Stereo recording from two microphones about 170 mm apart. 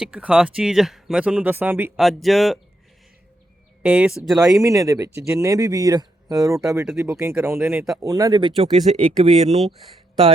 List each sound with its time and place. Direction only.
0.0 s speech: 5° right (ahead or behind)
2.2 s speech: centre (ahead or behind)
3.8 s speech: 5° right (ahead or behind)
4.6 s speech: 20° right (ahead or behind)
8.7 s speech: 40° right (ahead or behind)